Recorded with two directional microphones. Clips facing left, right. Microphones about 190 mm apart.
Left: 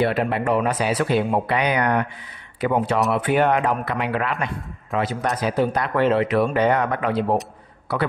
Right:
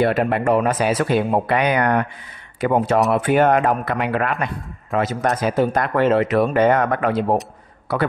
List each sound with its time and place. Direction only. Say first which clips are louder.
0.0 s speech: right 3 dB; 50° right (ahead or behind)